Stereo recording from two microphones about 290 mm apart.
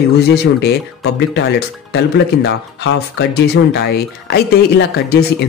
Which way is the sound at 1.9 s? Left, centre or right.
Left.